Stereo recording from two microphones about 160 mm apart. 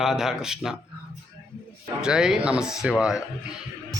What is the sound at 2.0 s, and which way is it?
Speech, 5° right (ahead or behind).